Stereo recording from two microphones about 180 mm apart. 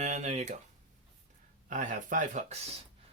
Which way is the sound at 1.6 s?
45° right (ahead or behind).